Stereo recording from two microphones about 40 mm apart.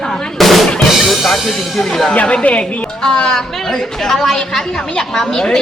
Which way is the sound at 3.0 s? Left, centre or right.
Centre.